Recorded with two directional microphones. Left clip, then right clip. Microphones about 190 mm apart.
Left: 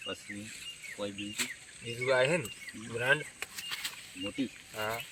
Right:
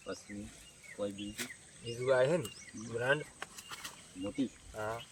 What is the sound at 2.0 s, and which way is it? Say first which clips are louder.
Speech: left 2 dB; 5° left (ahead or behind).